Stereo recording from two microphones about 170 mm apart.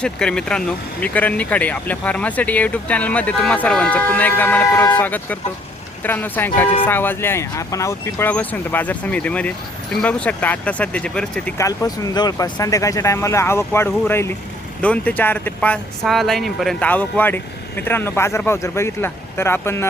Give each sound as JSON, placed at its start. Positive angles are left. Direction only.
{"t": 0.0, "sound": "speech", "side_deg": 5}
{"t": 11.5, "sound": "speech", "side_deg": 20}